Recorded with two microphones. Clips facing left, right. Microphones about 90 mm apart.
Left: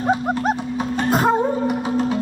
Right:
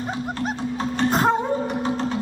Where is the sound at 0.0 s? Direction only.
60° left (ahead or behind).